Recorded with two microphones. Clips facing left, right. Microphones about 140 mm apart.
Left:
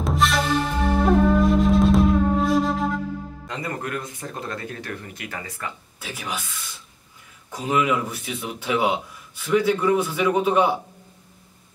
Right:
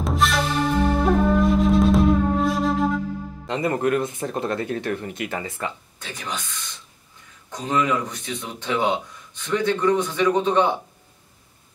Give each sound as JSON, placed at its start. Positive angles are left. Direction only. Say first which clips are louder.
{"t": 0.0, "sound": "music", "louder": "even", "side_deg": 0}
{"t": 3.4, "sound": "speech", "louder": "right 9 dB", "side_deg": -25}
{"t": 5.9, "sound": "speech", "louder": "even", "side_deg": 5}